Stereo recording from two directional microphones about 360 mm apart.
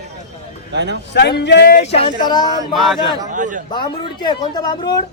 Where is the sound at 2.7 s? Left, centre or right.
Centre.